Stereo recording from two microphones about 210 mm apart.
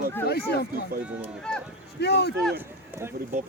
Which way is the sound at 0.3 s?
50° left (ahead or behind).